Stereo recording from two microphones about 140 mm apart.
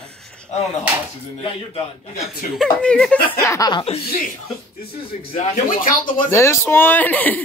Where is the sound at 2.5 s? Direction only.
5° left (ahead or behind).